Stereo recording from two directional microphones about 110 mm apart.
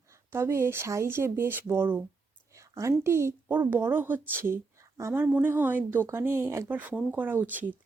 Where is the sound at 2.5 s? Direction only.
30° right (ahead or behind).